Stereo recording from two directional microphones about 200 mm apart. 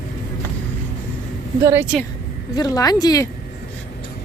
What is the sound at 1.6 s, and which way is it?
Speech, 10° right (ahead or behind).